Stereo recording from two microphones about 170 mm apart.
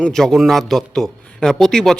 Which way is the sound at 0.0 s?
5° left (ahead or behind).